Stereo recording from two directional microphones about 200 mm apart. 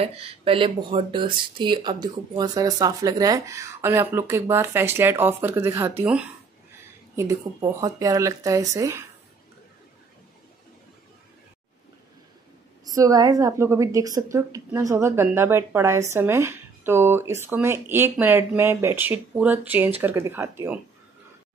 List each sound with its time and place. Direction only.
0.0 s a woman's voice: 30° right (ahead or behind)
7.6 s a woman's voice: 20° right (ahead or behind)
12.8 s a woman's voice: 15° right (ahead or behind)